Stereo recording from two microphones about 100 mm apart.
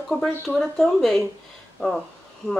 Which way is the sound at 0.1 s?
5° left (ahead or behind).